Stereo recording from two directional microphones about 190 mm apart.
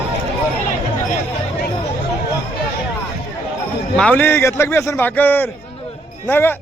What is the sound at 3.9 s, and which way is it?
A man's voice, 5° left (ahead or behind).